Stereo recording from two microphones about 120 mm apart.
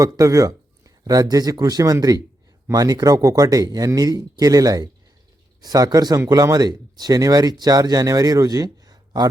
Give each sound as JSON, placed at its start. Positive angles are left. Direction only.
{"t": 0.0, "sound": "speech", "side_deg": -30}